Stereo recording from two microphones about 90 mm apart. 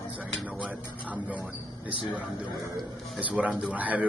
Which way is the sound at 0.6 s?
15° right (ahead or behind).